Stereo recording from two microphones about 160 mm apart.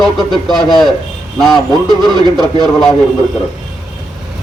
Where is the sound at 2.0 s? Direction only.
25° right (ahead or behind).